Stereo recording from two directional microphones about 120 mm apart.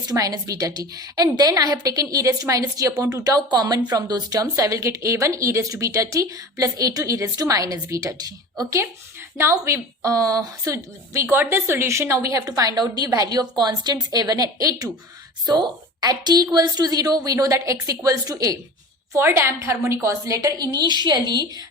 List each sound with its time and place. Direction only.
0.1 s a woman's voice: 30° right (ahead or behind)
19.1 s a woman's voice: 20° right (ahead or behind)